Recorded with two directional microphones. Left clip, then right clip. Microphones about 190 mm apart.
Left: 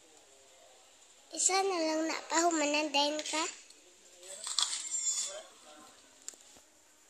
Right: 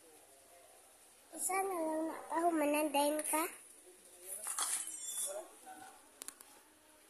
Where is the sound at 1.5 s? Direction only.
35° left (ahead or behind).